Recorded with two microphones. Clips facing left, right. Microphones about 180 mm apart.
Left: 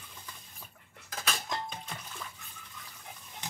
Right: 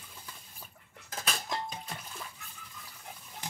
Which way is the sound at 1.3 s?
5° right (ahead or behind).